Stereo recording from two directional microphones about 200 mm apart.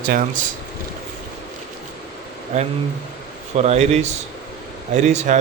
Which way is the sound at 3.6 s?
35° right (ahead or behind).